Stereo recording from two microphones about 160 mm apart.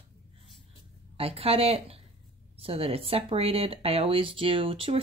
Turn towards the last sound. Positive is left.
turn(degrees=-35)  # may be behind; listen again after turning